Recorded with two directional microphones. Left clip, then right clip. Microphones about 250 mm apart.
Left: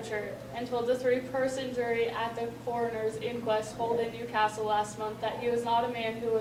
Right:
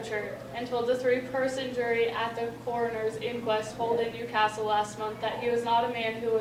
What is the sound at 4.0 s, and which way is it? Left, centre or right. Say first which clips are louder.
A woman's voice: right 2 dB; centre.